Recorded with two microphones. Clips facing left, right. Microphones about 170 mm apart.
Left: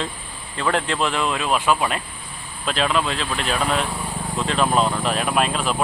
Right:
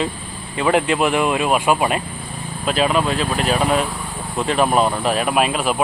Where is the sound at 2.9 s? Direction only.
45° right (ahead or behind).